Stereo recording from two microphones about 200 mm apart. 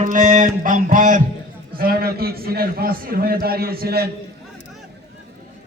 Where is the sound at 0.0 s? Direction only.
40° right (ahead or behind).